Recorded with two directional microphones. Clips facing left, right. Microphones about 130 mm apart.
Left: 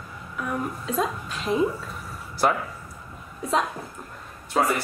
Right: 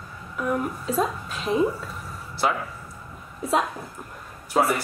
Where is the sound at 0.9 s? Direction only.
Centre (ahead or behind).